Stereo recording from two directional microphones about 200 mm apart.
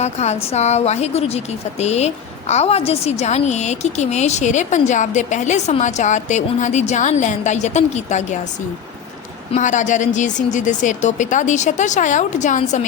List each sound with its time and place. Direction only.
0.0 s a woman's voice: 35° left (ahead or behind)
9.5 s a woman's voice: 40° left (ahead or behind)